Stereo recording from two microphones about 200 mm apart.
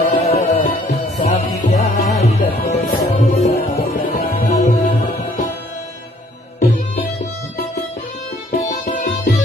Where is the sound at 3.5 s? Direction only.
45° left (ahead or behind).